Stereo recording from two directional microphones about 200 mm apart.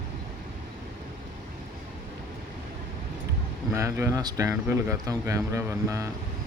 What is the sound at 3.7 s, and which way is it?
Speech, 15° right (ahead or behind).